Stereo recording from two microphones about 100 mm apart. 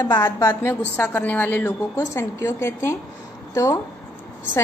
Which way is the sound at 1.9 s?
30° left (ahead or behind).